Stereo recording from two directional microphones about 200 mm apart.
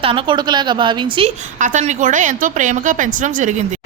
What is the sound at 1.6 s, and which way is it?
A woman's voice, 40° right (ahead or behind).